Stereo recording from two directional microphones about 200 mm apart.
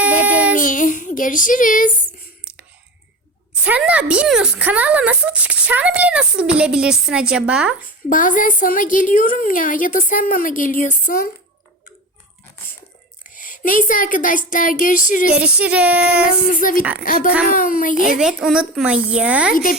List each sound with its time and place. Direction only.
0.0 s child singing: 10° right (ahead or behind)
0.5 s child singing: 40° left (ahead or behind)
3.6 s speech: 5° right (ahead or behind)
8.1 s a woman's voice: 40° left (ahead or behind)
13.2 s speech: 40° left (ahead or behind)
15.3 s female singing: 5° right (ahead or behind)
16.5 s a woman's voice: 45° left (ahead or behind)
17.9 s speech: 5° right (ahead or behind)